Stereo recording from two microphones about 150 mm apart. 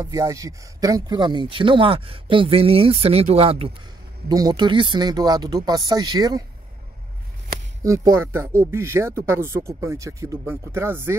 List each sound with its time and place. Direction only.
0.0 s speech: 20° right (ahead or behind); by 3.7 s 40° right (ahead or behind)
4.3 s speech: 25° right (ahead or behind)
7.8 s speech: 20° right (ahead or behind)